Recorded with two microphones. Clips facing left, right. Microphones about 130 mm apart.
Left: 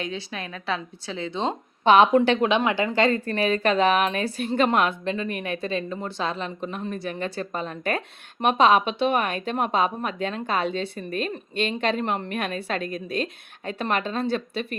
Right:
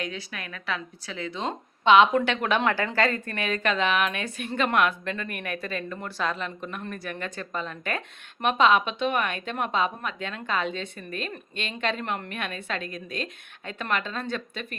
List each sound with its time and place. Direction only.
0.0 s a woman's voice: 30° left (ahead or behind)
1.8 s speech: 40° left (ahead or behind)
2.6 s a woman's voice: 15° left (ahead or behind); by 14.7 s 35° left (ahead or behind)